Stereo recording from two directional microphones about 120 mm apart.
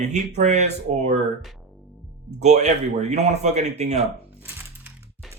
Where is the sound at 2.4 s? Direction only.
70° right (ahead or behind).